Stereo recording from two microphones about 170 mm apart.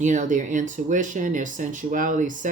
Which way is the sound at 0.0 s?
45° right (ahead or behind).